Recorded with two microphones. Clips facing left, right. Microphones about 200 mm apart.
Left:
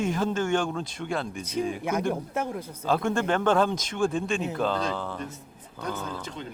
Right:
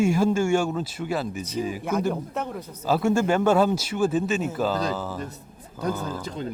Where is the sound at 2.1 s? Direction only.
10° left (ahead or behind).